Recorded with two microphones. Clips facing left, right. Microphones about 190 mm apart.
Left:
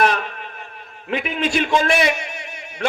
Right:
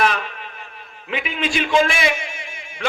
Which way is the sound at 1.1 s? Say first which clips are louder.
Left 3 dB; 45° left (ahead or behind).